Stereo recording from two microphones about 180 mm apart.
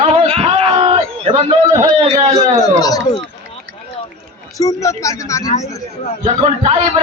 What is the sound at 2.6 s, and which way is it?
Speech, 20° left (ahead or behind).